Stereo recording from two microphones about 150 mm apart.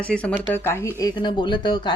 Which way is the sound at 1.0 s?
30° left (ahead or behind).